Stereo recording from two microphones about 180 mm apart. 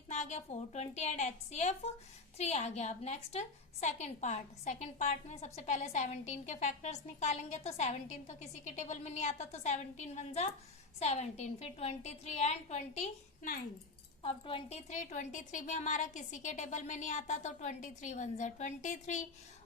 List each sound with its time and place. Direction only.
0.1 s a woman's voice: 40° left (ahead or behind)
14.2 s a woman's voice: 30° left (ahead or behind)